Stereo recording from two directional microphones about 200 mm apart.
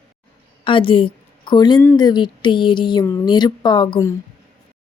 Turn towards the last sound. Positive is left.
turn(degrees=20)  # may be behind; listen again after turning